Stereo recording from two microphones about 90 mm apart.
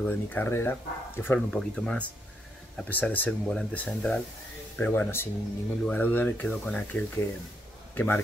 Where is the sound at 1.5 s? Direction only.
5° left (ahead or behind).